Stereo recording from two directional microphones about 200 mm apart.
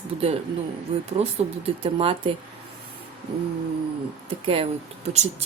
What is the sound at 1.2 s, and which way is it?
Speech, 30° right (ahead or behind).